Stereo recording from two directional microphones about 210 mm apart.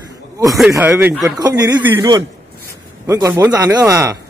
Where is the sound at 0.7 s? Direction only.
10° right (ahead or behind).